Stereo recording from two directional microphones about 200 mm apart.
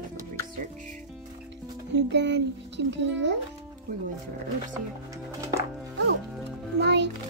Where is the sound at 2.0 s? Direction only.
60° right (ahead or behind).